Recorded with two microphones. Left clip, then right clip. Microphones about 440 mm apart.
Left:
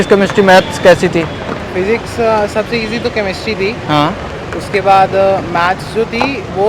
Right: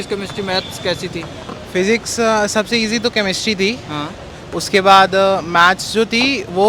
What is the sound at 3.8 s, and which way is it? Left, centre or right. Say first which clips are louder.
Speech: left 13 dB; centre.